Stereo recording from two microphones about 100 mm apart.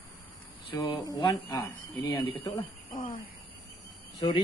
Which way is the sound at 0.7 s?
40° left (ahead or behind).